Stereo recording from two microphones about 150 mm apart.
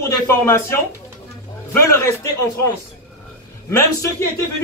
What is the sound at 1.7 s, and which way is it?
Speech, 15° left (ahead or behind).